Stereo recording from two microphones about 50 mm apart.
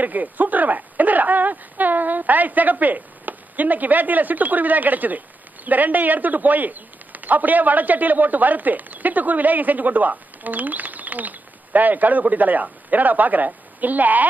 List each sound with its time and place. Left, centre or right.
0.0 s a man's voice: right